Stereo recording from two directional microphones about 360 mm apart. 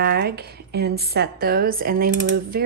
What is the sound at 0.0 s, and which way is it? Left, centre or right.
A woman's voice, right.